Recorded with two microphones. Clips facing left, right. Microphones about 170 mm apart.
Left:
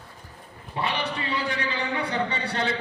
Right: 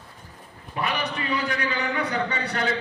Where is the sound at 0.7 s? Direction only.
30° left (ahead or behind).